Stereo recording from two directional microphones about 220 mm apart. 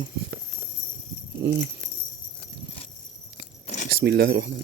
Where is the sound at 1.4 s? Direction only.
50° right (ahead or behind).